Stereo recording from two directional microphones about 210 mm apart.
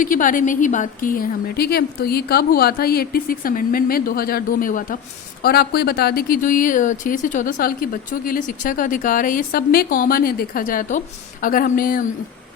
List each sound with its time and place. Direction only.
0.0 s a woman's voice: 40° left (ahead or behind)